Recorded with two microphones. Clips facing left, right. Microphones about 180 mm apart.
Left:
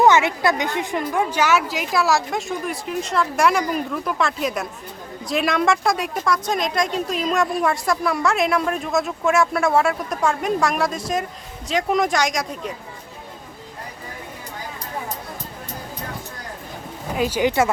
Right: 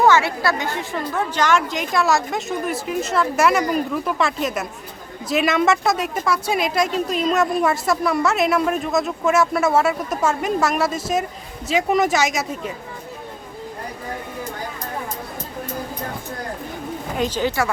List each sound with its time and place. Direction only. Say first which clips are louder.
0.0 s a woman's voice: left 1 dB; 20° left (ahead or behind); by 12.7 s 5° right (ahead or behind)
17.2 s a woman's voice: left 2 dB; 10° left (ahead or behind)